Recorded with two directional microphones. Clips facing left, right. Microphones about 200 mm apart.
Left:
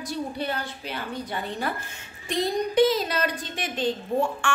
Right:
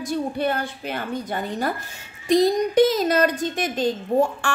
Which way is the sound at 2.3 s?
40° right (ahead or behind).